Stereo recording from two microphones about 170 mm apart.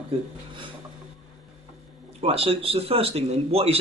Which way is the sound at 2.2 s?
35° right (ahead or behind).